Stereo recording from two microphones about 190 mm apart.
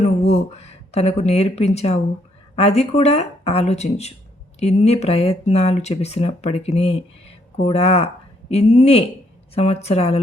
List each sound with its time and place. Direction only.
0.0 s speech: 35° left (ahead or behind)